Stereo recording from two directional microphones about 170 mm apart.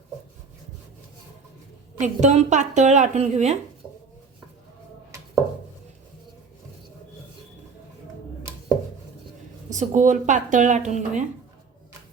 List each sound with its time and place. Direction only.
2.0 s speech: 40° right (ahead or behind)
9.6 s speech: 45° right (ahead or behind)